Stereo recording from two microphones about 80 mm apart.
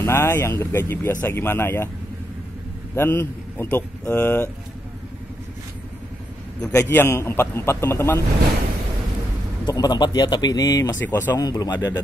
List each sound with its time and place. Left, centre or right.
0.0 s a man's voice: left
3.0 s speech: left
6.8 s a man's voice: left
9.7 s speech: left
11.0 s speech: left
11.3 s speech: left